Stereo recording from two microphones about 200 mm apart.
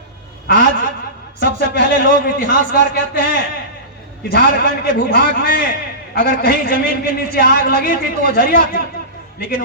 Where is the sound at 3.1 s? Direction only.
55° left (ahead or behind).